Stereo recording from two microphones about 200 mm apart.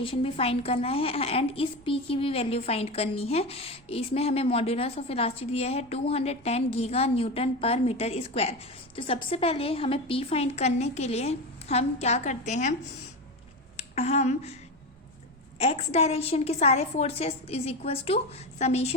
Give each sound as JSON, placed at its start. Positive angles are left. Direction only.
{"t": 0.0, "sound": "a woman's voice", "side_deg": 25}
{"t": 13.7, "sound": "speech", "side_deg": 30}
{"t": 15.5, "sound": "a woman's voice", "side_deg": 30}